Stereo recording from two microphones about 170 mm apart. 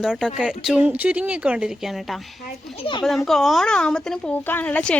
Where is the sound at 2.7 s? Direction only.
30° left (ahead or behind).